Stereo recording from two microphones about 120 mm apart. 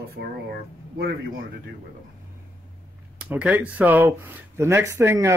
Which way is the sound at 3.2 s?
10° right (ahead or behind).